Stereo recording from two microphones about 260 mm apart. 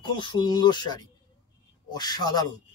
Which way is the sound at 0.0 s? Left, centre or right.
Centre.